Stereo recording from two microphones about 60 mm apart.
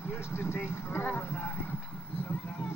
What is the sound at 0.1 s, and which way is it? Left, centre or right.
Vehicle, left.